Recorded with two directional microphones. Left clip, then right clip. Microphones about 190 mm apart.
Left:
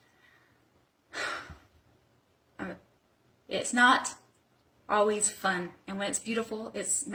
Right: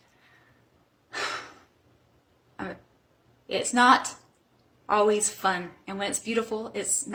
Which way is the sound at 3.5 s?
15° right (ahead or behind).